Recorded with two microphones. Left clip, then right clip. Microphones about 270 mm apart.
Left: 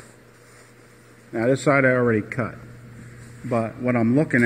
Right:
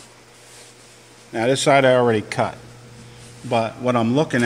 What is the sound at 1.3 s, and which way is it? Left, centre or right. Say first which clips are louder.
Speech: right 3 dB; right.